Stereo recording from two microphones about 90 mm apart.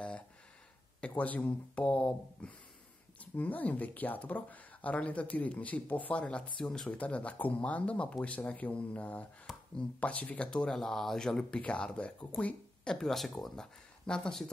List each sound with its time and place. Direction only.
1.0 s speech: 15° left (ahead or behind)